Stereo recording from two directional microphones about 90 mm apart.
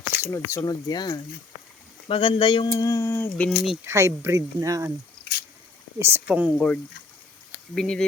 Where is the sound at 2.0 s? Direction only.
80° left; by 2.6 s 65° left (ahead or behind).